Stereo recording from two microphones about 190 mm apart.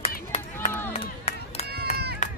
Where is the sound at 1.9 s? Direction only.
35° left (ahead or behind).